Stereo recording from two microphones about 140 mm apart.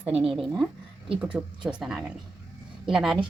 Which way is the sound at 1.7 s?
5° right (ahead or behind).